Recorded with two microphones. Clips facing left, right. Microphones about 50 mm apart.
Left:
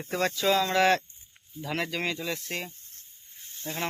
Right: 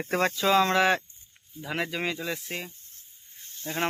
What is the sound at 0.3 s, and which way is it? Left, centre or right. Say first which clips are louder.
Speech: right 2 dB; centre.